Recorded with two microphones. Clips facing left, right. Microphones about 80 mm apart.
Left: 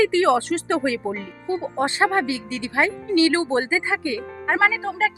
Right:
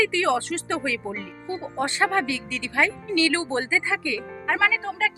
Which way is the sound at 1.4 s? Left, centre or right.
Centre.